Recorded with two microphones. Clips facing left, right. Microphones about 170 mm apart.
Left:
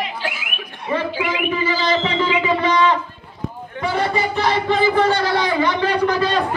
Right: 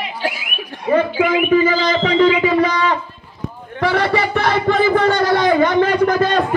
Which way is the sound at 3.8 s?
70° right (ahead or behind).